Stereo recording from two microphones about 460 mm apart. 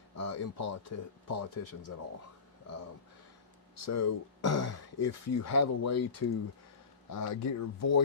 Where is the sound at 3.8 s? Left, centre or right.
Left.